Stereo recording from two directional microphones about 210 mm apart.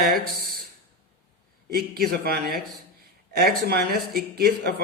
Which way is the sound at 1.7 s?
45° right (ahead or behind).